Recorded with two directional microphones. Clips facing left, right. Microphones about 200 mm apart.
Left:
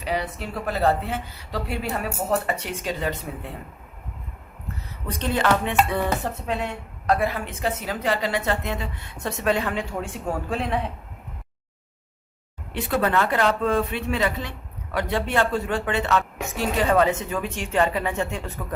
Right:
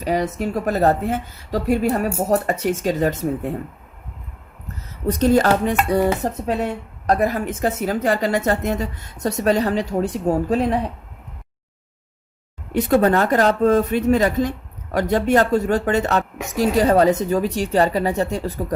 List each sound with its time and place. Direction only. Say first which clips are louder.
0.0 s a woman's voice: right 7 dB; 45° right (ahead or behind)
5.0 s dishes: right 7 dB; 40° right (ahead or behind)
12.7 s a woman's voice: right 7 dB; 45° right (ahead or behind)
14.9 s dishes: right 7 dB; 45° right (ahead or behind)